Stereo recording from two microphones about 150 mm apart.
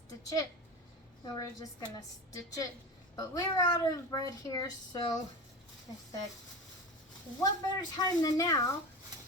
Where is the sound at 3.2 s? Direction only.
25° left (ahead or behind).